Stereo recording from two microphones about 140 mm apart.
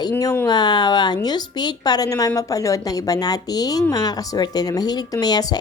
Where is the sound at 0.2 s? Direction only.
25° left (ahead or behind).